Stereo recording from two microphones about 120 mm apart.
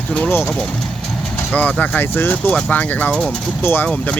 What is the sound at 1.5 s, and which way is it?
Speech, 10° left (ahead or behind).